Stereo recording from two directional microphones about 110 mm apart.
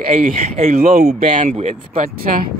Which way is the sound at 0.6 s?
90° right.